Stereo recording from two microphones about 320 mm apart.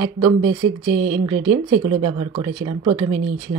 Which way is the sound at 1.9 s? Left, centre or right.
Centre.